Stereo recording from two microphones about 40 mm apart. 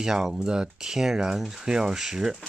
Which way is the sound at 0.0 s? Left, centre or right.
Centre.